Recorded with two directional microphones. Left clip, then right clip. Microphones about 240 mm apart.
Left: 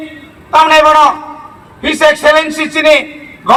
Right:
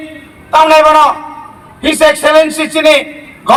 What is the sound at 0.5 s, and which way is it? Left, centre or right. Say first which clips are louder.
A man's voice: even; right.